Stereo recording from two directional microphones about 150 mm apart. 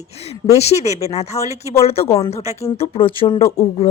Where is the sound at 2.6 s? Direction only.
40° left (ahead or behind).